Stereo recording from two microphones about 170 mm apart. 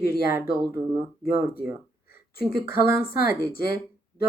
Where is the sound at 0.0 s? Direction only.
65° left (ahead or behind).